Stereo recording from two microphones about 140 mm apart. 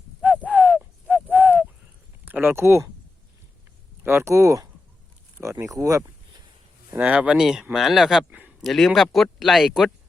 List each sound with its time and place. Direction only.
0.2 s a sound: 5° right (ahead or behind)
2.2 s speech: 15° right (ahead or behind)
4.0 s speech: 20° right (ahead or behind)
6.9 s speech: 10° right (ahead or behind)
8.3 s a sound: 10° right (ahead or behind)
8.7 s speech: centre (ahead or behind)